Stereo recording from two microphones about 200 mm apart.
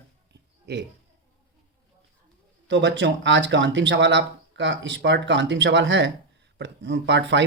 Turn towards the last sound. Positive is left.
turn(degrees=-60)  # may be behind; listen again after turning